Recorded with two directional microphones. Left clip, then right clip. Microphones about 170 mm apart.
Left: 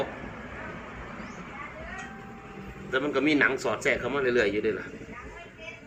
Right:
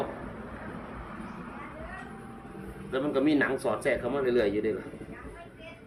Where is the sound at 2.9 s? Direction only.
35° right (ahead or behind).